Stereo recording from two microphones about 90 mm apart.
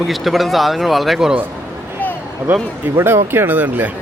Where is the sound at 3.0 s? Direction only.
25° right (ahead or behind).